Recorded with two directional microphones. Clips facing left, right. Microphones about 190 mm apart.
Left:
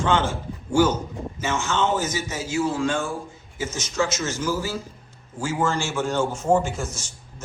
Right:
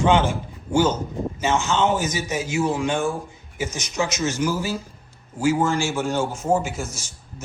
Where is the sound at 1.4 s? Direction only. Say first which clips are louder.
Right 3 dB; 15° right (ahead or behind).